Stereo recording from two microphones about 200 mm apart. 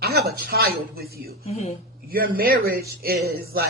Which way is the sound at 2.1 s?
50° right (ahead or behind).